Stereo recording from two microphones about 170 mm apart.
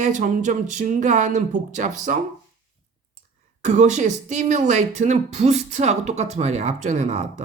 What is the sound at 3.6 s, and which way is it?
A woman's voice, 45° right (ahead or behind).